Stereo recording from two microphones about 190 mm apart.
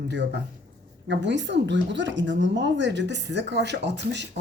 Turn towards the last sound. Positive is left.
turn(degrees=-65)  # may be behind; listen again after turning